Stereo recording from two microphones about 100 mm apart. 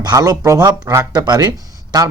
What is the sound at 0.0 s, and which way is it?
Speech, 40° right (ahead or behind).